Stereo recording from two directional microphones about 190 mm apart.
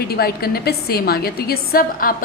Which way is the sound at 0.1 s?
55° left (ahead or behind).